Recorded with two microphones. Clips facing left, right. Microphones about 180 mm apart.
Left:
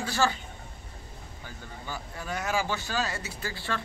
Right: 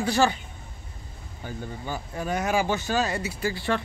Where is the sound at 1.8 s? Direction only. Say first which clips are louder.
Right 6 dB; 20° right (ahead or behind).